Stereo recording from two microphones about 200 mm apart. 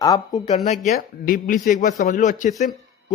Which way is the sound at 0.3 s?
35° left (ahead or behind).